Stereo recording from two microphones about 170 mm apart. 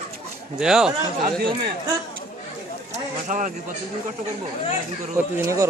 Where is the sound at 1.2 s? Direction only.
60° right (ahead or behind).